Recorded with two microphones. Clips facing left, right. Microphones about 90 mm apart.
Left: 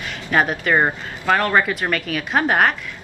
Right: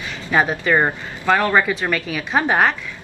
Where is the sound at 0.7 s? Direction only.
10° left (ahead or behind).